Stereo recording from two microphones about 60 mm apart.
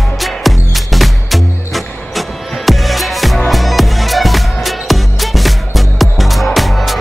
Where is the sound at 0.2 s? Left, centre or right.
Centre.